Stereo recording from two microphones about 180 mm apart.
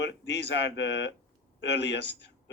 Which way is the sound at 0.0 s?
75° left (ahead or behind).